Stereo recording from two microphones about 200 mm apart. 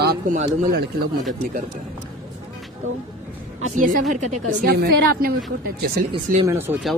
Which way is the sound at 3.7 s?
40° right (ahead or behind).